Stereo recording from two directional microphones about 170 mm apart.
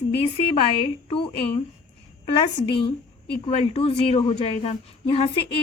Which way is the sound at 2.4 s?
30° left (ahead or behind).